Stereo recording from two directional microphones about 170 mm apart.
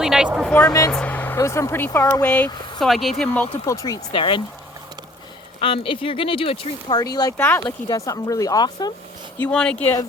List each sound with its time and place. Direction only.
0.0 s speech: 5° right (ahead or behind)
0.9 s speech: 10° left (ahead or behind)
3.7 s speech: 20° left (ahead or behind)
5.5 s speech: 30° left (ahead or behind)
7.3 s speech: 10° left (ahead or behind)
9.4 s speech: 5° left (ahead or behind)